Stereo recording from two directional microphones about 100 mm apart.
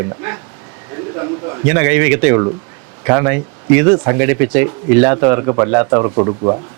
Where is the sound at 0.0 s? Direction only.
25° right (ahead or behind).